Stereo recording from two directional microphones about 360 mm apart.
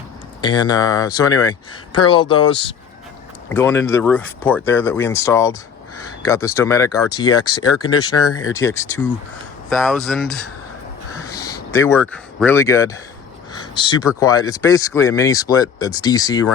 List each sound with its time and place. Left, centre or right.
0.4 s speech: centre
8.3 s speech: left
8.5 s speech: centre